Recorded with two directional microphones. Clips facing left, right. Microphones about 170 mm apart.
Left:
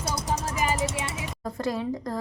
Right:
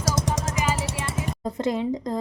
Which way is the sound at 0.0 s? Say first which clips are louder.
Right 3 dB; 90° right.